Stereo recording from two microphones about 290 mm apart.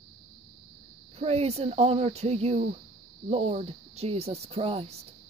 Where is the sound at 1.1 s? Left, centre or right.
Right.